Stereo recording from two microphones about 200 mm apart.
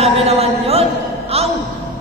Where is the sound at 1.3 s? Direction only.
30° right (ahead or behind).